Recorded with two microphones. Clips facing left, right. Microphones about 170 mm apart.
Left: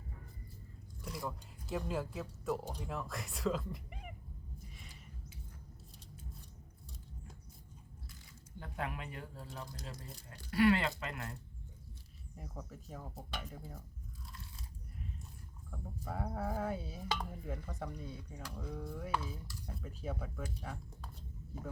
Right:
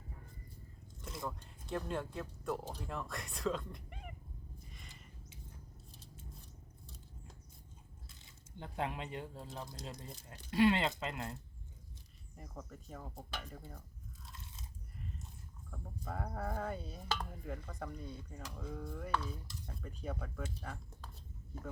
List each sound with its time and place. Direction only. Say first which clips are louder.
1.6 s speech: left 1 dB; 5° left (ahead or behind)
4.7 s a sound: left 1 dB; centre (ahead or behind)
8.2 s speech: right 1 dB; 25° right (ahead or behind)
12.4 s speech: left 1 dB; 5° left (ahead or behind)
14.3 s crunch: even; 20° right (ahead or behind)
15.7 s speech: left 1 dB; 5° left (ahead or behind)